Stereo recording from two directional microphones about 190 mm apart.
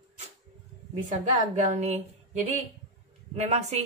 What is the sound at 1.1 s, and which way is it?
Speech, 40° right (ahead or behind).